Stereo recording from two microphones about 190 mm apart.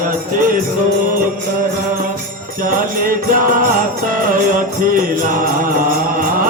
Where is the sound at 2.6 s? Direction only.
45° right (ahead or behind).